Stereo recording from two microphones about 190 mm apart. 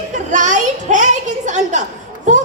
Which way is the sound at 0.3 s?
40° right (ahead or behind).